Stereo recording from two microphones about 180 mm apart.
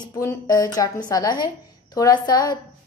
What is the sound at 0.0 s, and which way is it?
A woman's voice, 15° left (ahead or behind).